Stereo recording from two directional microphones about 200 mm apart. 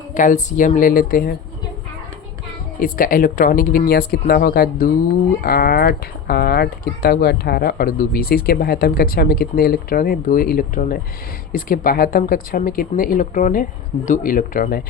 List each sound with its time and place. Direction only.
0.1 s speech: 40° left (ahead or behind)
2.8 s speech: 45° left (ahead or behind)